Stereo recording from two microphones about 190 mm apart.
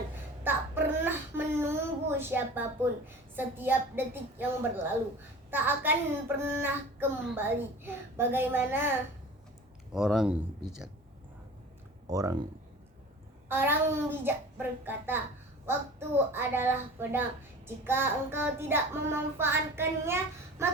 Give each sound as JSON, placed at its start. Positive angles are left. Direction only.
{"t": 0.4, "sound": "child singing", "side_deg": -10}
{"t": 9.9, "sound": "speech", "side_deg": 0}
{"t": 12.1, "sound": "child singing", "side_deg": -15}
{"t": 13.5, "sound": "child singing", "side_deg": -10}